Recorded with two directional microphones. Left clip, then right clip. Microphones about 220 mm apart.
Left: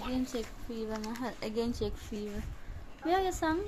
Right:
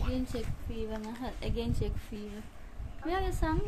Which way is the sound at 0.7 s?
20° left (ahead or behind).